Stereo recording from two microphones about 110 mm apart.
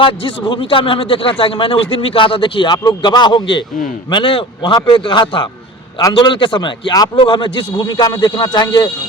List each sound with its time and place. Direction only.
0.0 s a man's voice: 50° left (ahead or behind)
6.0 s a man's voice: 40° left (ahead or behind)